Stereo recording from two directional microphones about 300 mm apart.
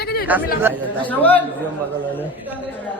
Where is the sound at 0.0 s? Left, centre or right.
Left.